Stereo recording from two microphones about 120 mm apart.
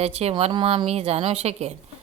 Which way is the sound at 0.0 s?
60° right (ahead or behind).